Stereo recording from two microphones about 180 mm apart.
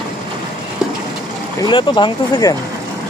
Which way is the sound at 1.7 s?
25° left (ahead or behind).